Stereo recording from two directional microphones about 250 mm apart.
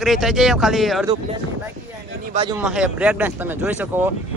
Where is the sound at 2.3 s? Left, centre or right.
Right.